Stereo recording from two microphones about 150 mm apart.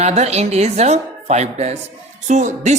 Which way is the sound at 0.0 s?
45° right (ahead or behind).